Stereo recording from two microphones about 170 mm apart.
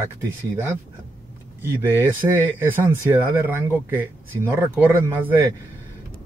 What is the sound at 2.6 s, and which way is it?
Speech, 10° right (ahead or behind).